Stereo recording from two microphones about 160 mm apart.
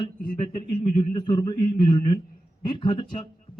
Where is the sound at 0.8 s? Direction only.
30° left (ahead or behind).